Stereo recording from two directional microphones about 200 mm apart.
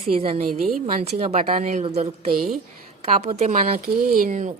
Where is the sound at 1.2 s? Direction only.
30° right (ahead or behind).